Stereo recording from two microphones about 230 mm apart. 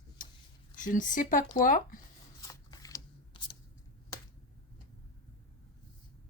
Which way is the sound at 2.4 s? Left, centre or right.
Centre.